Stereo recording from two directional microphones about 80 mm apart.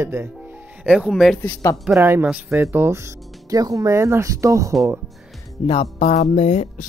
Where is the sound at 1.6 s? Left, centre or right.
Left.